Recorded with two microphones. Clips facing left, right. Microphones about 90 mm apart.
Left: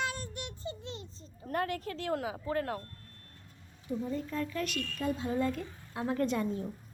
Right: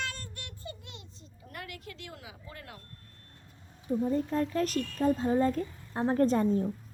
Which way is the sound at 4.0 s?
55° right (ahead or behind).